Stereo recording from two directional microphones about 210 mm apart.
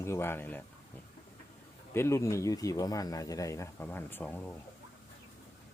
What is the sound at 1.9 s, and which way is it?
Speech, 15° left (ahead or behind).